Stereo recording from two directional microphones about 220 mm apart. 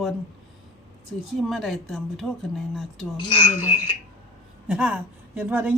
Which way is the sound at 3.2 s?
25° left (ahead or behind).